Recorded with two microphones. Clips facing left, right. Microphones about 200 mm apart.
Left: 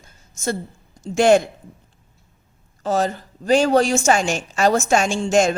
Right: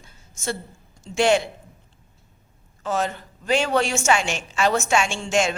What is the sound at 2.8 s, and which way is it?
A woman's voice, 35° left (ahead or behind).